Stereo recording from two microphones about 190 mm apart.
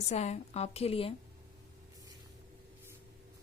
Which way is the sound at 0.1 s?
35° left (ahead or behind).